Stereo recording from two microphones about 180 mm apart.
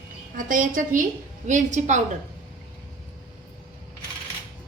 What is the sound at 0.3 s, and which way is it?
A woman's voice, 50° right (ahead or behind).